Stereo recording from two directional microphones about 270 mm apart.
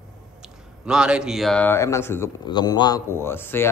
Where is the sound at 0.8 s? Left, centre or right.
Centre.